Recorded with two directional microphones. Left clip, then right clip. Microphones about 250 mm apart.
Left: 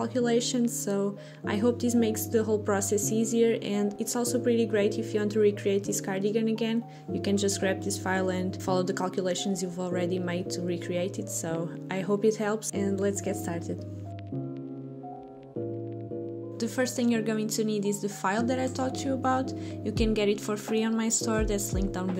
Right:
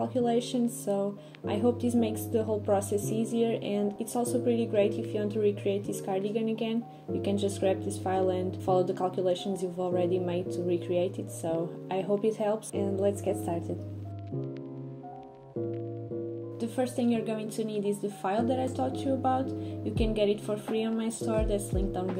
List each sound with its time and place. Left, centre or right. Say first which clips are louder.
0.0 s speech: left 1 dB; left
16.5 s speech: left 2 dB; left